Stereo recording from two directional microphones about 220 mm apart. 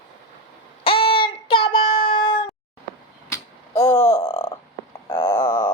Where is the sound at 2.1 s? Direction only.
25° left (ahead or behind).